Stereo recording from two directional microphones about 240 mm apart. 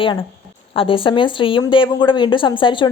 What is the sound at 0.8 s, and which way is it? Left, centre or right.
A woman's voice, left.